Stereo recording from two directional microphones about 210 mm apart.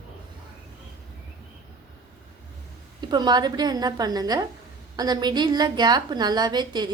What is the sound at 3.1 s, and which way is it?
A woman's voice, 20° right (ahead or behind).